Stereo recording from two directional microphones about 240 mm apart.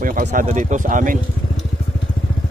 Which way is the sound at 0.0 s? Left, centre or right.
Right.